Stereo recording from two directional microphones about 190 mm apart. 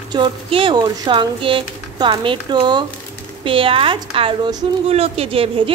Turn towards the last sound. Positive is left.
turn(degrees=-30)  # may be behind; listen again after turning